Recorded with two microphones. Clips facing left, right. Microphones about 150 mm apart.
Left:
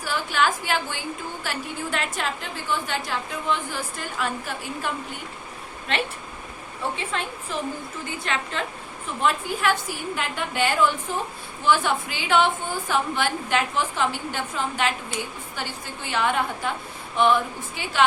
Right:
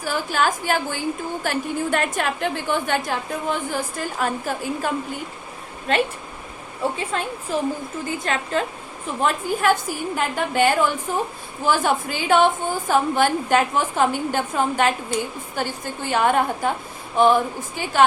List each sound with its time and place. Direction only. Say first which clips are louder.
0.0 s a sound: right 2 dB; 45° right (ahead or behind)
1.5 s a woman's voice: right 8 dB; 50° right (ahead or behind)
5.9 s a woman's voice: right 6 dB; 40° right (ahead or behind)
7.1 s a woman's voice: right 5 dB; 40° right (ahead or behind)